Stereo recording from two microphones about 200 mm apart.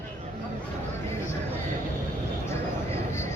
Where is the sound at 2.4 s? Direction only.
15° left (ahead or behind).